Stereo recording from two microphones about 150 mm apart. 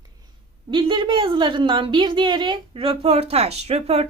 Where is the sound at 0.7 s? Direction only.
35° right (ahead or behind).